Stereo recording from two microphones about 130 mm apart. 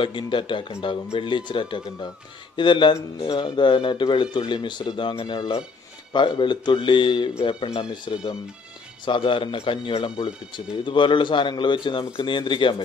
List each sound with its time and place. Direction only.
0.0 s speech: 40° left (ahead or behind)